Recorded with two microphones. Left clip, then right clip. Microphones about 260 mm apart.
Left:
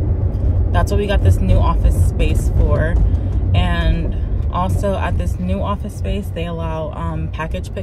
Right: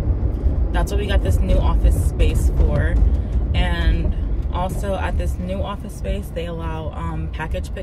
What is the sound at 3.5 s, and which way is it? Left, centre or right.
Speech, centre.